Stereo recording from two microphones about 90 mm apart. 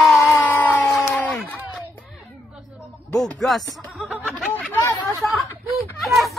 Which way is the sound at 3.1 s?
5° left (ahead or behind).